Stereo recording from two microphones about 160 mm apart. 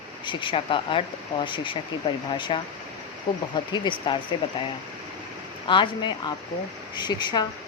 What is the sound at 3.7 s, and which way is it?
Speech, 30° left (ahead or behind).